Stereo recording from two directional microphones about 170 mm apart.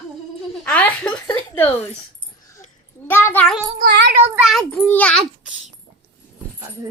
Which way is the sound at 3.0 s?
10° left (ahead or behind).